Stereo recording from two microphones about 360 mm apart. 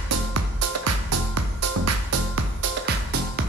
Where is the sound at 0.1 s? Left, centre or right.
Right.